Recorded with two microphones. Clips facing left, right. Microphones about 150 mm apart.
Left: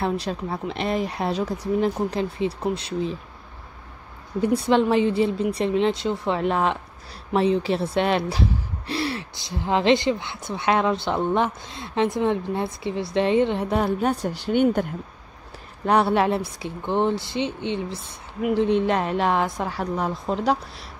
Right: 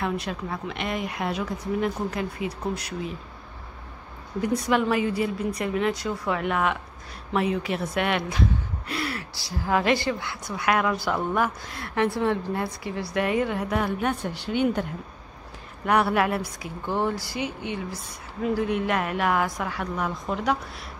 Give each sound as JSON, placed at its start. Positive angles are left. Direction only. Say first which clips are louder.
{"t": 0.0, "sound": "a woman's voice", "louder": "left 3 dB", "side_deg": 30}
{"t": 4.4, "sound": "speech", "louder": "left 4 dB", "side_deg": 30}
{"t": 15.8, "sound": "speech", "louder": "left 3 dB", "side_deg": 30}